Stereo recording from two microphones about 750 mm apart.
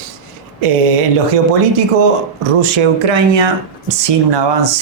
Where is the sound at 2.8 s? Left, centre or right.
Right.